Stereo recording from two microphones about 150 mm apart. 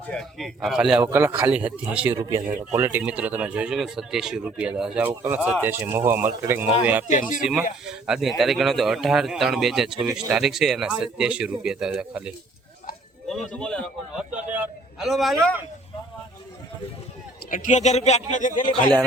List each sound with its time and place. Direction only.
0.1 s speech: centre (ahead or behind)
2.1 s speech: 20° right (ahead or behind)
7.9 s speech: 5° right (ahead or behind)
13.2 s a man's voice: 5° left (ahead or behind)
14.2 s speech: 5° right (ahead or behind)
17.5 s speech: 55° left (ahead or behind)